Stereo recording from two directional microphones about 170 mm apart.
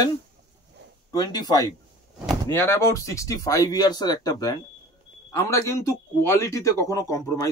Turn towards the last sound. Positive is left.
turn(degrees=20)  # may be behind; listen again after turning